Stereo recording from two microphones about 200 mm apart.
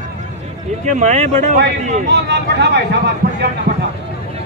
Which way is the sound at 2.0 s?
60° right (ahead or behind).